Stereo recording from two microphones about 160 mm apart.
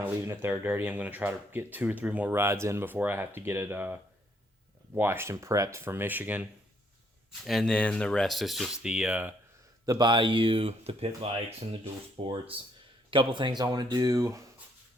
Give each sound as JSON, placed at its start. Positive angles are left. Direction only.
{"t": 0.0, "sound": "speech", "side_deg": -15}
{"t": 7.4, "sound": "speech", "side_deg": 5}
{"t": 9.8, "sound": "speech", "side_deg": -25}